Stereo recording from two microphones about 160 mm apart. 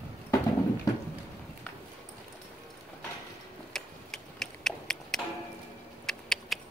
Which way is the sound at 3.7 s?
Centre (ahead or behind).